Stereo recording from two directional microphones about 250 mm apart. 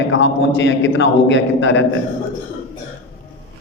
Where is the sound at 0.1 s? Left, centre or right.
Left.